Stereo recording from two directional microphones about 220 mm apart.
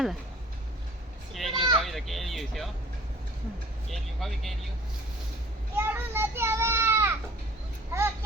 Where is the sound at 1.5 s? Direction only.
20° right (ahead or behind).